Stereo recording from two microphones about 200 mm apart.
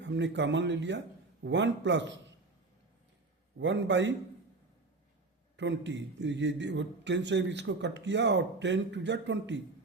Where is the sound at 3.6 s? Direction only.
60° right (ahead or behind).